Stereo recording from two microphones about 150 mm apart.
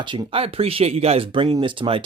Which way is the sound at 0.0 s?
35° right (ahead or behind).